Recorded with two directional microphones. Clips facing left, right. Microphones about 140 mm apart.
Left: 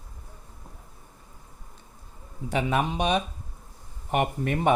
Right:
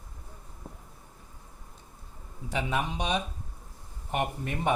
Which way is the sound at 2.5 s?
65° left (ahead or behind).